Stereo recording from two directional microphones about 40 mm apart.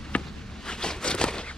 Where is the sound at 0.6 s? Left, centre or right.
Centre.